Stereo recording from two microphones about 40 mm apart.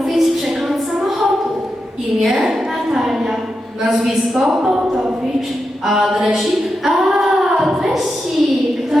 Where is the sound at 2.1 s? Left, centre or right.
Centre.